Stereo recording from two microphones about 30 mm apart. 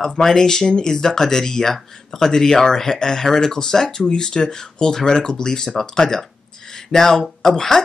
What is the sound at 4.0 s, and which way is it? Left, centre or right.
Speech, left.